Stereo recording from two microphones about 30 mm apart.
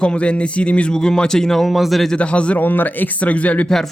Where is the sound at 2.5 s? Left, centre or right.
Left.